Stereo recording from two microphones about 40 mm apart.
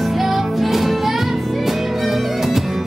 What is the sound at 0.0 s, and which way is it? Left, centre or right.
Music, centre.